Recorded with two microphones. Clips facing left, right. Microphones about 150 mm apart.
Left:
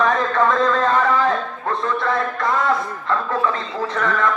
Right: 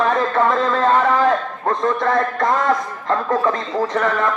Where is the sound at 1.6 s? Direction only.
45° right (ahead or behind).